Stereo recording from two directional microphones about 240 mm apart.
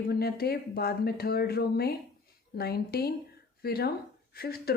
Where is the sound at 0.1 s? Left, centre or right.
Left.